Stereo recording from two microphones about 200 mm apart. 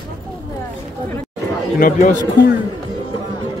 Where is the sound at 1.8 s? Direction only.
40° left (ahead or behind).